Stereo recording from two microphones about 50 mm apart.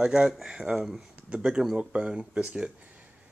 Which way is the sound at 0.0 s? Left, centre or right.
Centre.